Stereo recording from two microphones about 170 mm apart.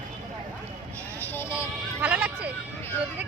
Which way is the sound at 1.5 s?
10° right (ahead or behind).